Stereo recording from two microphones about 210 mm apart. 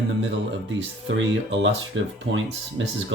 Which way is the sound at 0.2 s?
60° right (ahead or behind).